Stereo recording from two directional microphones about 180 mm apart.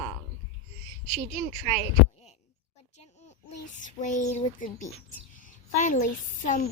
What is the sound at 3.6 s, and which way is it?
A child's voice, 45° left (ahead or behind).